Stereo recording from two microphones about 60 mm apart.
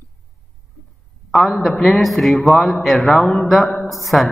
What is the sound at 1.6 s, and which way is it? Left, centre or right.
Speech, centre.